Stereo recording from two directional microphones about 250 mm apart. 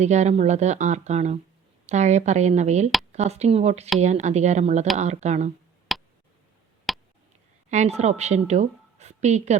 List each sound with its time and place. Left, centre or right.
0.0 s speech: right
5.9 s a sound: centre
7.7 s a woman's voice: right